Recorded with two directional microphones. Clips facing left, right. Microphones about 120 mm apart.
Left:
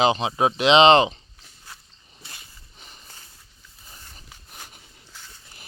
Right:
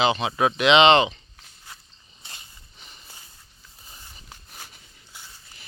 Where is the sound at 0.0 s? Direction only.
35° left (ahead or behind).